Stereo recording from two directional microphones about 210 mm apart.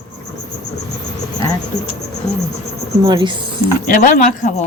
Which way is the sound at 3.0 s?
20° right (ahead or behind).